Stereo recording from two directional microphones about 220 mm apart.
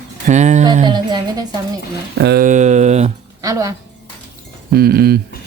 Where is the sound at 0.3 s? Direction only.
35° right (ahead or behind).